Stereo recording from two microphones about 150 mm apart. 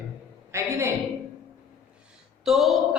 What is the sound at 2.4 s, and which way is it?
Speech, centre (ahead or behind).